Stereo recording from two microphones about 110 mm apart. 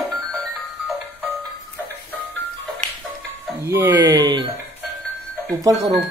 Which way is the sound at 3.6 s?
20° right (ahead or behind).